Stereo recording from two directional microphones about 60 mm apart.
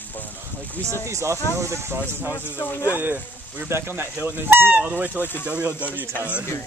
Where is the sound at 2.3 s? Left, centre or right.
Left.